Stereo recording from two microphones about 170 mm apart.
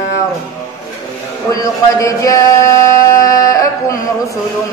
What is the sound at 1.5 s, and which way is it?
Speech, 20° left (ahead or behind).